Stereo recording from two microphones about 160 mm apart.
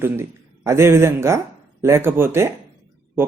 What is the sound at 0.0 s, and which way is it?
Speech, 15° right (ahead or behind).